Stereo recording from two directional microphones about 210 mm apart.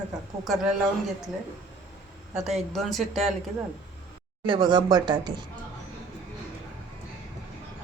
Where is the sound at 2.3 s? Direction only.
Centre (ahead or behind).